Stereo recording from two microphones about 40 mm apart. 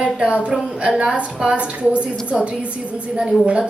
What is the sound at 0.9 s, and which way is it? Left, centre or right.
Speech, right.